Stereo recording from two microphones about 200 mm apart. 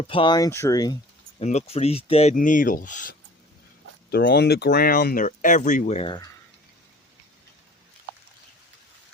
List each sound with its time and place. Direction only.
0.1 s speech: 25° left (ahead or behind)
1.4 s speech: 35° left (ahead or behind)
2.3 s speech: 40° left (ahead or behind)
4.1 s speech: 55° left (ahead or behind); by 6.1 s 30° left (ahead or behind)